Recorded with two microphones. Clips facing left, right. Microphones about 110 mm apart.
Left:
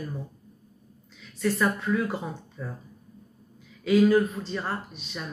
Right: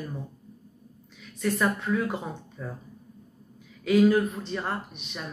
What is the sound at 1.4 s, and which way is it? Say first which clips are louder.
Speech: left 1 dB; 20° right (ahead or behind).